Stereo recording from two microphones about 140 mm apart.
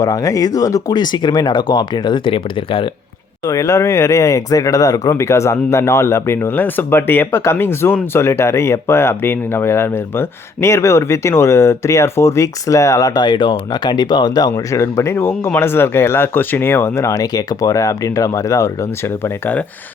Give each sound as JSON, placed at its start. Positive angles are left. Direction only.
{"t": 0.0, "sound": "speech", "side_deg": 25}
{"t": 3.4, "sound": "speech", "side_deg": 20}